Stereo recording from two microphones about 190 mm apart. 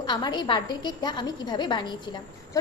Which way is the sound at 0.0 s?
20° left (ahead or behind).